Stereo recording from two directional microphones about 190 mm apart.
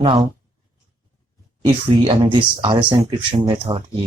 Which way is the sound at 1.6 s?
25° right (ahead or behind).